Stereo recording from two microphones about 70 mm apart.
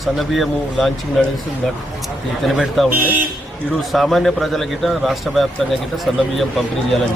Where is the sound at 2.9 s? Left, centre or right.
Right.